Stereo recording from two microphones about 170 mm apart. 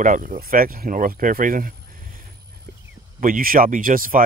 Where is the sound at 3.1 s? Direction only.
55° right (ahead or behind).